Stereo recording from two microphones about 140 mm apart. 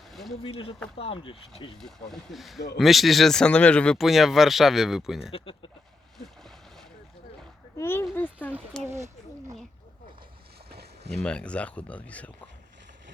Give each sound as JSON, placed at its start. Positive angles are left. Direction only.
{"t": 0.1, "sound": "a sound", "side_deg": 0}
{"t": 0.4, "sound": "speech", "side_deg": 40}
{"t": 1.8, "sound": "speech", "side_deg": 5}
{"t": 7.8, "sound": "speech", "side_deg": 15}
{"t": 11.2, "sound": "speech", "side_deg": 5}